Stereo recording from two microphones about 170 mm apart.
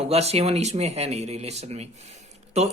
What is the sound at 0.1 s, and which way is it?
Speech, 40° right (ahead or behind).